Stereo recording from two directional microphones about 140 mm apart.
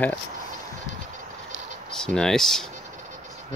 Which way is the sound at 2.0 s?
5° left (ahead or behind).